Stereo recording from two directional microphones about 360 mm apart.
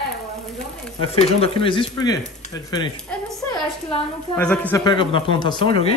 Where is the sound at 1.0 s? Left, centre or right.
Centre.